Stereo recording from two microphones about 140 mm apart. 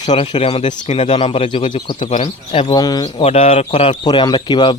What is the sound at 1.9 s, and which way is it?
Speech, 60° left (ahead or behind).